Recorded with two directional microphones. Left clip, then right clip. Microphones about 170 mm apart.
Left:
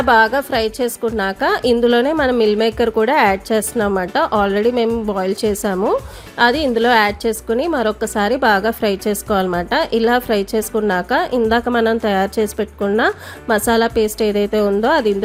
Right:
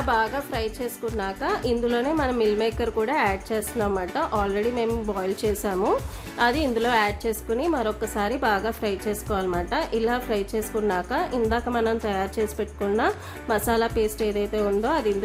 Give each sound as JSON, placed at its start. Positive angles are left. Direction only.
{"t": 0.0, "sound": "a woman's voice", "side_deg": 40}